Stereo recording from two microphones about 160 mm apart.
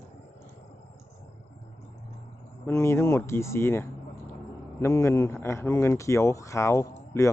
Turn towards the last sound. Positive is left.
turn(degrees=15)  # may be behind; listen again after turning